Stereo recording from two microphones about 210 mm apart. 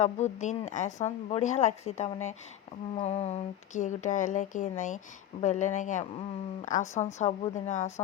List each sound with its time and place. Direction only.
0.0 s speech: 35° left (ahead or behind)